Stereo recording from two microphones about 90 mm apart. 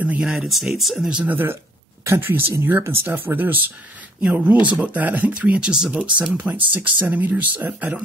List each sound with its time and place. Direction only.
0.2 s speech: 5° right (ahead or behind)
1.2 s speech: 20° right (ahead or behind)